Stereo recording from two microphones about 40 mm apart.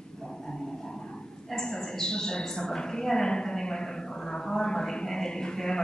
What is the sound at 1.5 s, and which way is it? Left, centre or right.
A woman's voice, centre.